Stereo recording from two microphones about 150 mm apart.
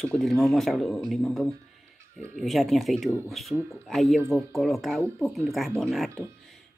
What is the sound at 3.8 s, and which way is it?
Speech, centre (ahead or behind).